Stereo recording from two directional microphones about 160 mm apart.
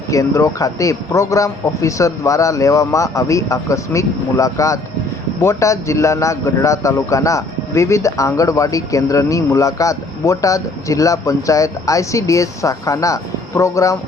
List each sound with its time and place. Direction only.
0.1 s a man's voice: 20° left (ahead or behind)